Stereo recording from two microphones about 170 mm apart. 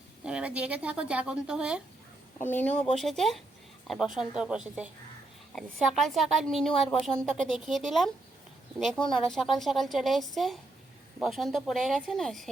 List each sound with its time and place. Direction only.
0.3 s speech: 5° right (ahead or behind)
2.4 s a woman's voice: 10° left (ahead or behind)